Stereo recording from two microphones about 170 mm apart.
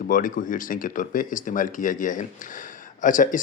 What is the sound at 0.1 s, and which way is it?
A man's voice, 50° left (ahead or behind).